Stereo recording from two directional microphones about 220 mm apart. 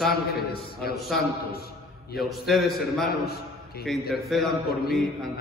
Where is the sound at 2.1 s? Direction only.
Centre (ahead or behind).